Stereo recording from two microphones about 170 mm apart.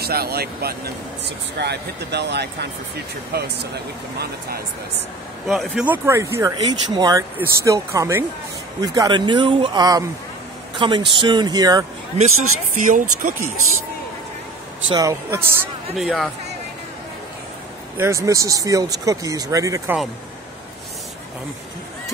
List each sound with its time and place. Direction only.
0.0 s speech: 65° right (ahead or behind)
1.6 s speech: 80° right
5.5 s speech: 5° right (ahead or behind); by 11.8 s 25° right (ahead or behind)
12.7 s speech: 50° right (ahead or behind)
14.9 s speech: 20° right (ahead or behind)
16.0 s speech: centre (ahead or behind)
17.9 s speech: 15° right (ahead or behind)